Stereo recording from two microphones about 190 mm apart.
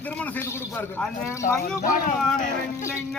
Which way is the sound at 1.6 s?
45° left (ahead or behind).